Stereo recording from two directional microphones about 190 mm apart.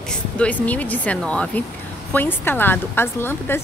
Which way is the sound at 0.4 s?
10° left (ahead or behind).